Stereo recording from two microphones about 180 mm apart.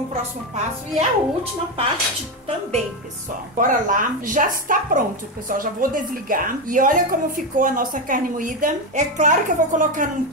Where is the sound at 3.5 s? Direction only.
50° right (ahead or behind).